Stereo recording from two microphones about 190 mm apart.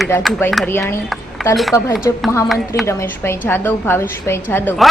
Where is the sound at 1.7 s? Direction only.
15° left (ahead or behind).